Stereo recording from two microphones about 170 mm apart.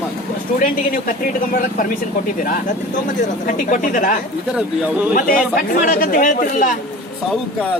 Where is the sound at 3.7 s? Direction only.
50° left (ahead or behind).